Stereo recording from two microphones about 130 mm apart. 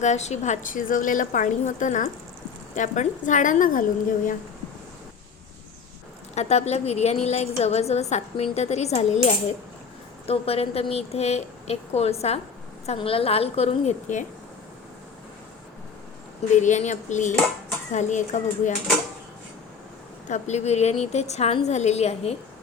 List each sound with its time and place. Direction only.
0.0 s a woman's voice: 60° left (ahead or behind); by 3.8 s 90° left
6.3 s a woman's voice: 55° left (ahead or behind)
10.2 s a woman's voice: 50° left (ahead or behind)
16.6 s speech: 70° left (ahead or behind)
20.2 s a woman's voice: 65° left (ahead or behind)